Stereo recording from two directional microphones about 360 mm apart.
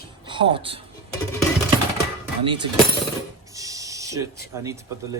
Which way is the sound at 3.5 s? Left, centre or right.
Centre.